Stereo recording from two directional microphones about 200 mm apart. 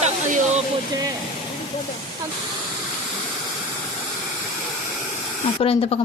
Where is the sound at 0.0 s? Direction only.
35° right (ahead or behind).